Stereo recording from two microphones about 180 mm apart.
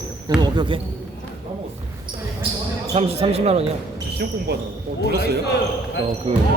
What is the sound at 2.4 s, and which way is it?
Speech, 30° right (ahead or behind).